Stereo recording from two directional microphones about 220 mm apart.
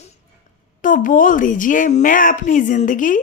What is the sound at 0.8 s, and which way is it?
Speech, 35° left (ahead or behind).